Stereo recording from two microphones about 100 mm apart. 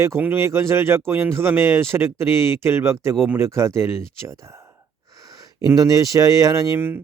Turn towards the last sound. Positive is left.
turn(degrees=-25)  # may be behind; listen again after turning